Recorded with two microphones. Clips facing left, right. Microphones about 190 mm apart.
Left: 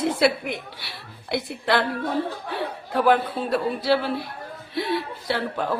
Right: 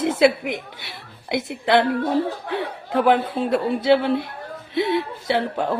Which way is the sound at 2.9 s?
20° right (ahead or behind).